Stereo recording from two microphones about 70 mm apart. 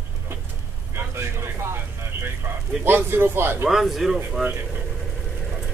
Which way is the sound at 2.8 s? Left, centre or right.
Right.